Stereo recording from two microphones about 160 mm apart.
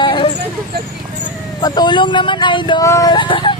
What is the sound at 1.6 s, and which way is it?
Speech, 25° left (ahead or behind).